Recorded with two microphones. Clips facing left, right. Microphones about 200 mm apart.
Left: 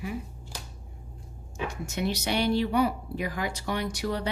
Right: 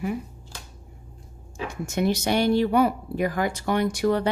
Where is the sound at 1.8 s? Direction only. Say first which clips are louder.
Right 7 dB; 50° right (ahead or behind).